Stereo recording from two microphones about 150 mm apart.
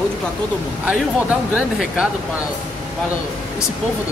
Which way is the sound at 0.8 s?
10° right (ahead or behind).